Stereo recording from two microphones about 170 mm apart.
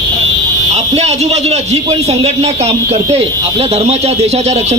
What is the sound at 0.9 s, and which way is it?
Speech, 40° right (ahead or behind).